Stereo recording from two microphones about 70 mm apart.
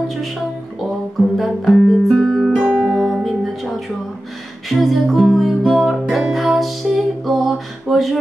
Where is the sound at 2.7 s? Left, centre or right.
Right.